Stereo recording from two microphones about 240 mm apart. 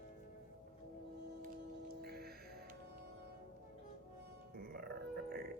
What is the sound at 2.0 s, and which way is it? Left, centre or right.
Music, right.